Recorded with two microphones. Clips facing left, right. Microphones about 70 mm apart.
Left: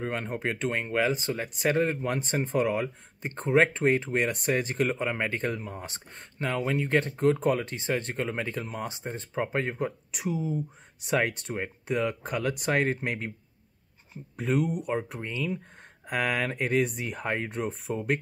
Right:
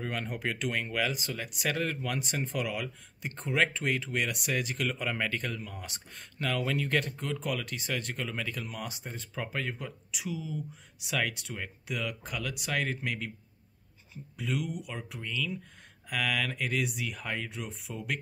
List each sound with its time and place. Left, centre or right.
0.0 s speech: left